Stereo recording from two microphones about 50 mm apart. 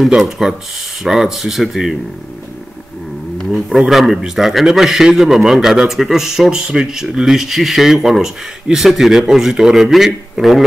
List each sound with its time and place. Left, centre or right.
0.2 s speech: centre
3.4 s a man's voice: centre
10.4 s a man's voice: centre